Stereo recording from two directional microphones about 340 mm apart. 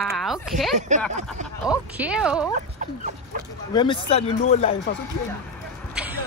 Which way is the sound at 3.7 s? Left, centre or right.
Centre.